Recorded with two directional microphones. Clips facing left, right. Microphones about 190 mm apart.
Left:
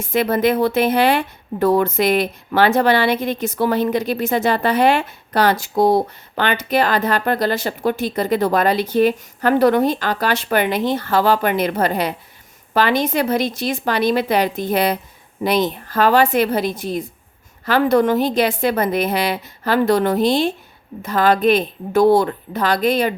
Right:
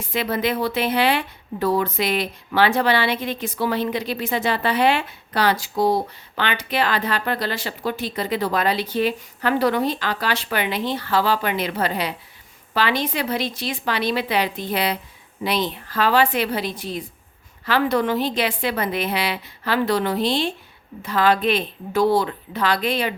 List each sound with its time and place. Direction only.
0.0 s a woman's voice: 45° left (ahead or behind)